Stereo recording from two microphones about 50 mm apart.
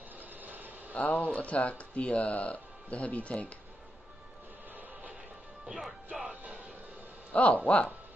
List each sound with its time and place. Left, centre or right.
0.2 s a sound: right
0.9 s speech: left
6.2 s music: right
7.3 s speech: left